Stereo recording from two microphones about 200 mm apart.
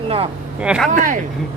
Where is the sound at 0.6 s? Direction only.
5° right (ahead or behind).